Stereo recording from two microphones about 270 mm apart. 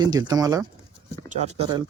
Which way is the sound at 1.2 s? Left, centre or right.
Right.